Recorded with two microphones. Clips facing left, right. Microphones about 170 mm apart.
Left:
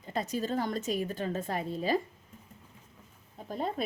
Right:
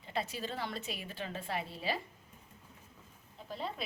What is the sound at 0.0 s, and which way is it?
A woman's voice, 45° left (ahead or behind).